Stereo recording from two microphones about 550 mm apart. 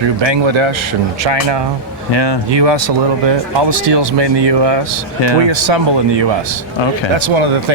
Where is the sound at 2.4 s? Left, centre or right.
Right.